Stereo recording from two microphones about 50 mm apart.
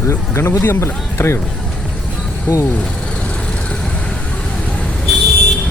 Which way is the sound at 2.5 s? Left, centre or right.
Left.